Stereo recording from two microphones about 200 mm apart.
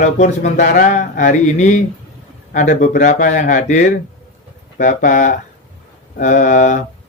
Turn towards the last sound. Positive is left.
turn(degrees=40)  # may be behind; listen again after turning